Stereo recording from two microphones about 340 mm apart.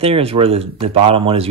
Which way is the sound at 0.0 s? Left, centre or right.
Centre.